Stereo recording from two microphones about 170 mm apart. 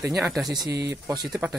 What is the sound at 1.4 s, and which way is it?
Speech, 15° right (ahead or behind).